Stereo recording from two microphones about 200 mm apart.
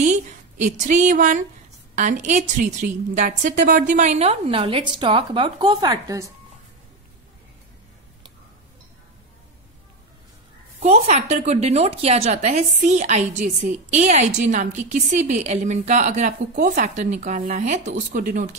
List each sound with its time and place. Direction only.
0.7 s a woman's voice: 40° right (ahead or behind); by 6.3 s 15° right (ahead or behind)
10.8 s a woman's voice: 35° right (ahead or behind)